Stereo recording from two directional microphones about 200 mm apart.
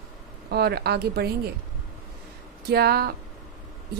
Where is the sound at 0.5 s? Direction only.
55° right (ahead or behind).